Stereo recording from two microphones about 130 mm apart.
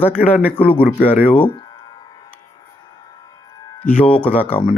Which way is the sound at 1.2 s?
40° left (ahead or behind).